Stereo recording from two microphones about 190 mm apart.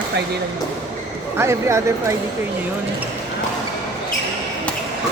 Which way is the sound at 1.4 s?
15° right (ahead or behind).